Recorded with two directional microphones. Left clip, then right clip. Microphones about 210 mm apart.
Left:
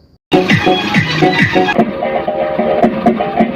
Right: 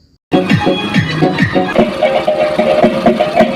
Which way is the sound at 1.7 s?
60° right (ahead or behind).